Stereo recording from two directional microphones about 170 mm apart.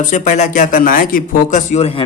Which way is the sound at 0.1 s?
45° left (ahead or behind).